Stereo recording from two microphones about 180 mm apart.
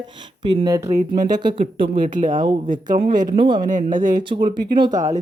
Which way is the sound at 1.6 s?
50° right (ahead or behind).